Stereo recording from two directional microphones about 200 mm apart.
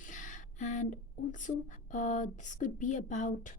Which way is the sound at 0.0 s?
40° left (ahead or behind).